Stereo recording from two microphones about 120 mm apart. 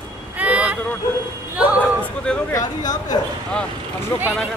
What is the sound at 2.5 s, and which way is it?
Speech, 35° left (ahead or behind).